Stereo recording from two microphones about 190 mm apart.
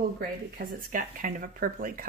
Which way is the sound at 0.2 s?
50° right (ahead or behind).